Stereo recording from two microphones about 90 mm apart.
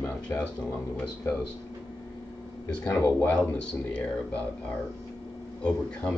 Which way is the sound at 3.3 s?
10° left (ahead or behind).